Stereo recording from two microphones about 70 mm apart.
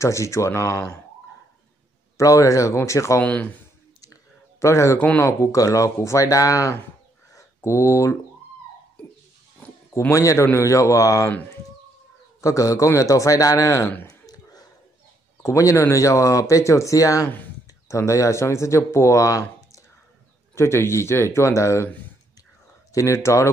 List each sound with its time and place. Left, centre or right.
0.0 s speech: left
2.1 s speech: left
3.2 s speech: centre
4.0 s a sound: left
4.9 s speech: left
5.2 s speech: left
9.9 s speech: left
12.4 s speech: left
14.2 s a sound: left
15.4 s speech: left
20.5 s speech: left
22.9 s speech: left